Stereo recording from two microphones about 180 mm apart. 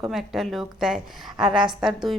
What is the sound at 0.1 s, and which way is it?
A woman's voice, centre (ahead or behind).